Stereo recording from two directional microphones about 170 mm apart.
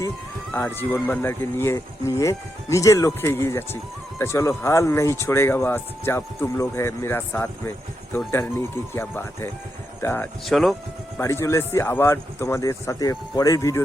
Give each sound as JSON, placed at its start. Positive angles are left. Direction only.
{"t": 0.5, "sound": "speech", "side_deg": 10}
{"t": 10.4, "sound": "speech", "side_deg": 0}
{"t": 11.2, "sound": "speech", "side_deg": 15}